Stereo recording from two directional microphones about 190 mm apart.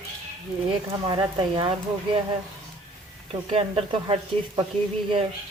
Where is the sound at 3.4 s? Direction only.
30° right (ahead or behind).